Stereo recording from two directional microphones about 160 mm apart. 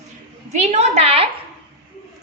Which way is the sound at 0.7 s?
40° right (ahead or behind).